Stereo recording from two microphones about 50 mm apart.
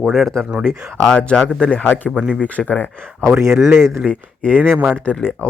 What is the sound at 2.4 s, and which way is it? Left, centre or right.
Speech, left.